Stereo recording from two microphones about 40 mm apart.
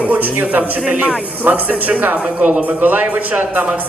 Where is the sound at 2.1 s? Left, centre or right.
Right.